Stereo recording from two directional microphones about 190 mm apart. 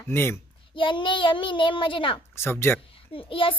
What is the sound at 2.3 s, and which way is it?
Speech, 15° left (ahead or behind).